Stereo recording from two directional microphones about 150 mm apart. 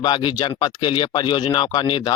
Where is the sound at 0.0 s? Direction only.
30° left (ahead or behind).